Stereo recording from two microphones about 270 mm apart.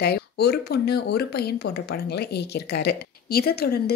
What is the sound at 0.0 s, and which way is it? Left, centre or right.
Speech, left.